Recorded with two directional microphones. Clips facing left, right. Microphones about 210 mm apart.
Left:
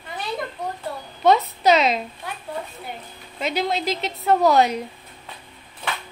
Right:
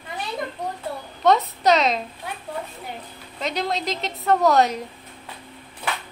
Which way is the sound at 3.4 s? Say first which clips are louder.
Left 2 dB; 5° left (ahead or behind).